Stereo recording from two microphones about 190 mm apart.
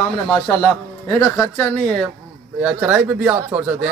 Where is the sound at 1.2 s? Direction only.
15° left (ahead or behind).